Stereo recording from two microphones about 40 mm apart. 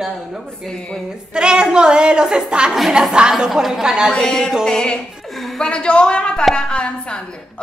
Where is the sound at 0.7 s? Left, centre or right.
Centre.